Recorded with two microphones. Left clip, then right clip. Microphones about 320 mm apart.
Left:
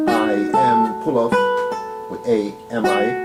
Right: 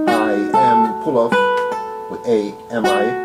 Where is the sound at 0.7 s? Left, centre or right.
Centre.